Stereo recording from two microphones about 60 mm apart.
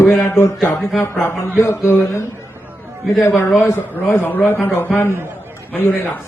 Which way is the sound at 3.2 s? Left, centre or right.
Left.